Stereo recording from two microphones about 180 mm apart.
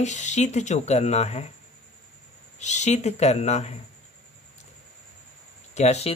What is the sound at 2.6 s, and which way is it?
Speech, 40° left (ahead or behind).